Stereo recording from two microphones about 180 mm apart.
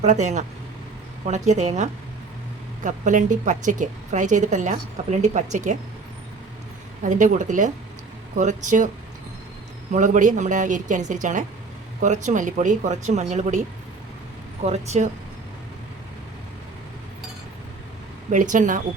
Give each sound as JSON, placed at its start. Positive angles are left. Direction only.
{"t": 0.0, "sound": "a woman's voice", "side_deg": -40}
{"t": 7.0, "sound": "a woman's voice", "side_deg": -45}
{"t": 9.9, "sound": "a woman's voice", "side_deg": -45}
{"t": 14.6, "sound": "speech", "side_deg": -40}
{"t": 18.3, "sound": "a woman's voice", "side_deg": -45}